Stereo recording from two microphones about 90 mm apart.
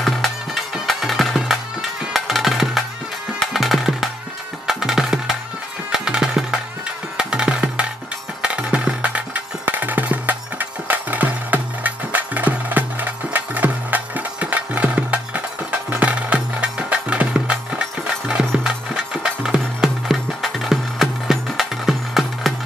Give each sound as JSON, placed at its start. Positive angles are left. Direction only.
{"t": 0.0, "sound": "music", "side_deg": 0}
{"t": 19.2, "sound": "music", "side_deg": -5}